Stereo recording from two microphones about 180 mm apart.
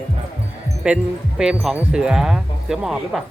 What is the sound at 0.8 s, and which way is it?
Speech, 5° right (ahead or behind).